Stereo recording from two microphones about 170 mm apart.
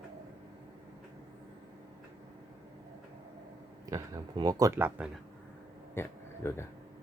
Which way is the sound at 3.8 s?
20° right (ahead or behind).